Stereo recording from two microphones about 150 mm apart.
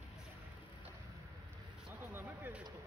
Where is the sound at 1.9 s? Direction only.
10° right (ahead or behind).